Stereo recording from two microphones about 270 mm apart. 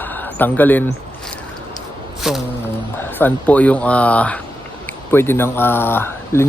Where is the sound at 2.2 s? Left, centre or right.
Centre.